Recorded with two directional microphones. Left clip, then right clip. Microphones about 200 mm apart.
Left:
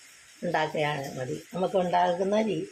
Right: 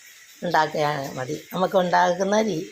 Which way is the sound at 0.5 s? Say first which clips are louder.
Right 6 dB; 15° right (ahead or behind).